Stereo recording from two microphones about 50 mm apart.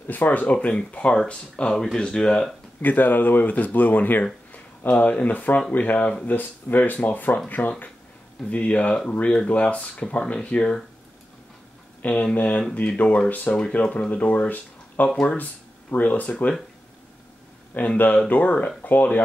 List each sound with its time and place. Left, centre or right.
0.0 s speech: left; by 2.4 s centre
2.8 s speech: left
12.0 s speech: left
13.6 s speech: left
17.7 s speech: left